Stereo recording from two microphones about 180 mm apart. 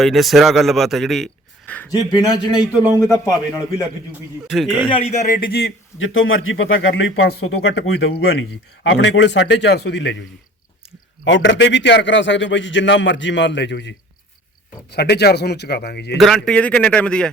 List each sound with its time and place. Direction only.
0.0 s a man's voice: centre (ahead or behind)
1.9 s a man's voice: 20° left (ahead or behind)
4.4 s a man's voice: centre (ahead or behind)
4.9 s a man's voice: 40° left (ahead or behind); by 10.2 s 85° left
11.3 s a man's voice: 90° left; by 16.1 s 65° left (ahead or behind)
16.1 s a man's voice: centre (ahead or behind)